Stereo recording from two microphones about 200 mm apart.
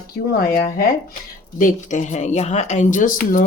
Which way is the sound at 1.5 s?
40° left (ahead or behind).